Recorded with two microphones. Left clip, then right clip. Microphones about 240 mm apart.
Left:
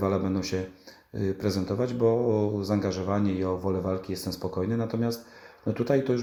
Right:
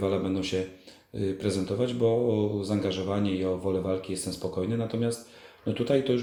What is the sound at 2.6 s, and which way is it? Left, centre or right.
Speech, centre.